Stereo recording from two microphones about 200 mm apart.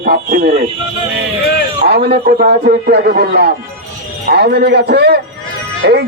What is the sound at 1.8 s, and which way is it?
A man's voice, 50° right (ahead or behind).